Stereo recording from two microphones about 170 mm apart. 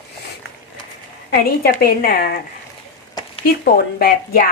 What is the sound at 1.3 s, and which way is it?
A woman's voice, 65° left (ahead or behind).